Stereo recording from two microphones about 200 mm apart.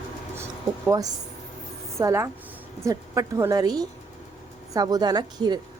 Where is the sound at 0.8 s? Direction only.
15° right (ahead or behind).